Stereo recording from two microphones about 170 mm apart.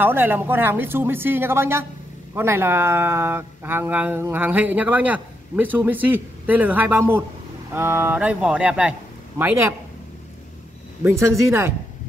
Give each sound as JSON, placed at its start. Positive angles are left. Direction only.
{"t": 0.0, "sound": "speech", "side_deg": -10}
{"t": 11.1, "sound": "speech", "side_deg": -15}